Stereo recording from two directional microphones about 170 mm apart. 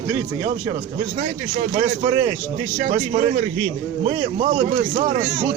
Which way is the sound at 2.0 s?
30° right (ahead or behind).